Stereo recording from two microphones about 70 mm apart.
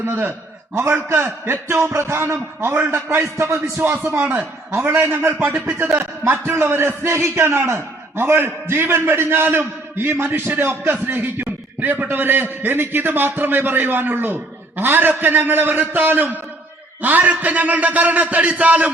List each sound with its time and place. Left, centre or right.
0.0 s a man's voice: right
3.8 s a man's voice: right